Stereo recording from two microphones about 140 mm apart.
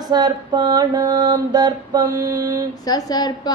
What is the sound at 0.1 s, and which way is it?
Mantra, 30° right (ahead or behind).